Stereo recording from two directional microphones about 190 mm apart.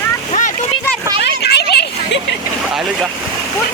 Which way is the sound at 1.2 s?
60° left (ahead or behind).